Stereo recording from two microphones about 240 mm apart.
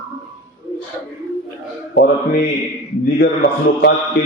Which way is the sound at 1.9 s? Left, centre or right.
Left.